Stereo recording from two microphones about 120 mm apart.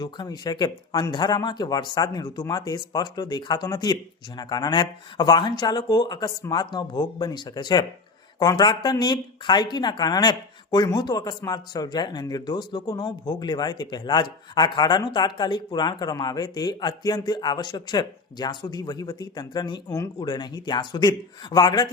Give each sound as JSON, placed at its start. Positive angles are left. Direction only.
{"t": 0.0, "sound": "speech", "side_deg": 35}